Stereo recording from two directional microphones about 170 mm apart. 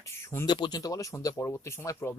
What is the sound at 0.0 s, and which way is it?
Speech, 15° left (ahead or behind).